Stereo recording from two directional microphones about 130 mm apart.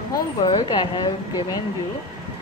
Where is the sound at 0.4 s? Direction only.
35° left (ahead or behind).